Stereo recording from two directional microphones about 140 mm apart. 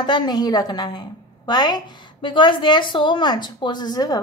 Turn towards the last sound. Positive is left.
turn(degrees=30)  # may be behind; listen again after turning